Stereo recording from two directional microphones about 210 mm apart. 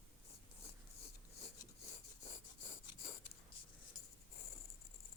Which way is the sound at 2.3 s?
25° left (ahead or behind).